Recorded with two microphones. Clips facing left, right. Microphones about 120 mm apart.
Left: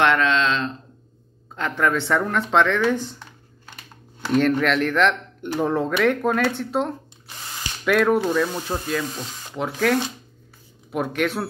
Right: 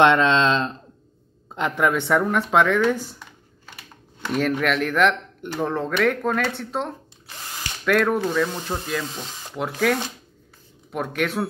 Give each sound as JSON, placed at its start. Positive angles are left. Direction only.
{"t": 0.0, "sound": "speech", "side_deg": -25}
{"t": 1.5, "sound": "speech", "side_deg": -15}
{"t": 4.2, "sound": "speech", "side_deg": 0}
{"t": 5.5, "sound": "speech", "side_deg": 5}